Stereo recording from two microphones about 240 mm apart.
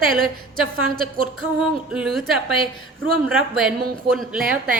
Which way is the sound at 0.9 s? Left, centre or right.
Right.